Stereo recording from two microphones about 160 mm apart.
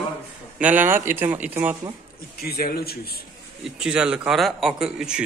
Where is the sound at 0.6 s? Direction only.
10° right (ahead or behind).